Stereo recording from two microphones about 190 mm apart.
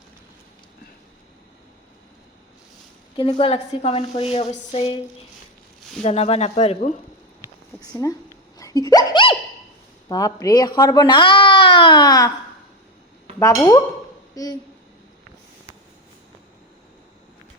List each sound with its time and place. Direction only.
3.2 s speech: 30° left (ahead or behind)
6.0 s speech: 35° left (ahead or behind)
7.8 s speech: 15° left (ahead or behind)
8.5 s a sound: 20° left (ahead or behind)
10.1 s speech: 20° left (ahead or behind)
13.4 s speech: 15° left (ahead or behind)